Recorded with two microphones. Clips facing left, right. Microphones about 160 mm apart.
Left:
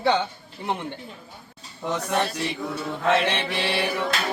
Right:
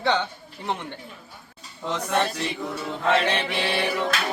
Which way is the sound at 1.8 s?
10° left (ahead or behind).